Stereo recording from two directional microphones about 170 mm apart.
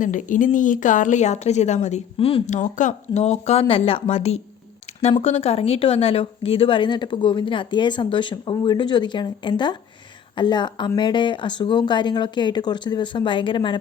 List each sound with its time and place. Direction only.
0.0 s speech: 50° left (ahead or behind); by 13.7 s 30° left (ahead or behind)